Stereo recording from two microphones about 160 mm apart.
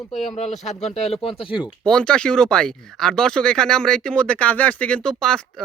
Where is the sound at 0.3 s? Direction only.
45° left (ahead or behind).